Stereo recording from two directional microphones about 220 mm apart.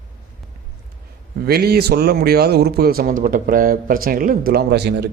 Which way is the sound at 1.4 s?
45° right (ahead or behind).